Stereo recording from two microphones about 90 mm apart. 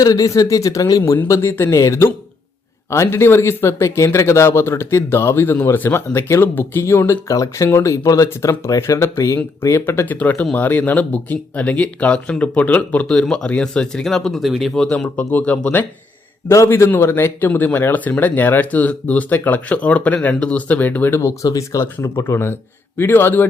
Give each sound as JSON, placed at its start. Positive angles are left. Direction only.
{"t": 0.0, "sound": "speech", "side_deg": 40}
{"t": 1.3, "sound": "speech", "side_deg": 30}
{"t": 10.2, "sound": "speech", "side_deg": 15}
{"t": 14.8, "sound": "speech", "side_deg": 10}
{"t": 16.5, "sound": "speech", "side_deg": 30}
{"t": 22.0, "sound": "speech", "side_deg": 30}